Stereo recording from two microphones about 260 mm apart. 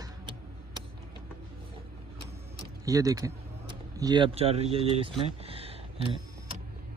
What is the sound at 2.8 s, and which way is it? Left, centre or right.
A man's voice, centre.